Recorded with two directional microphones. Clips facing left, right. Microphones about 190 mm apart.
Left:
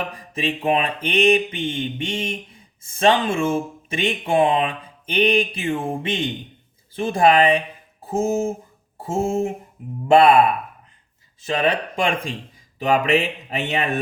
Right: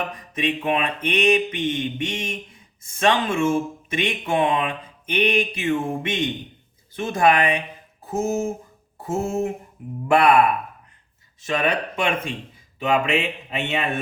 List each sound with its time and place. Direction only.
0.3 s speech: 30° left (ahead or behind)
11.4 s speech: 30° left (ahead or behind)